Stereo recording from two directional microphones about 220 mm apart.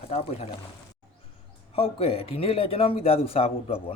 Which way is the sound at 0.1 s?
30° left (ahead or behind).